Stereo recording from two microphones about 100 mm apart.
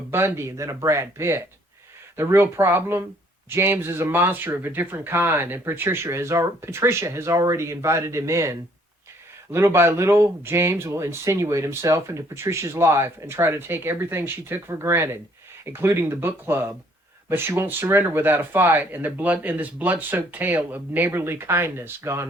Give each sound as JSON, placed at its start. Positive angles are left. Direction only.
{"t": 0.1, "sound": "speech", "side_deg": -25}